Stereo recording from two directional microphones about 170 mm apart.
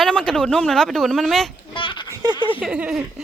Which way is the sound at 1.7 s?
30° left (ahead or behind).